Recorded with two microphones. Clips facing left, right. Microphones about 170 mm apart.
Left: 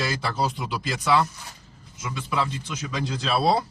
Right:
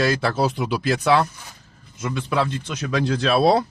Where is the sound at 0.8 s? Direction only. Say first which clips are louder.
Right 4 dB; 60° right (ahead or behind).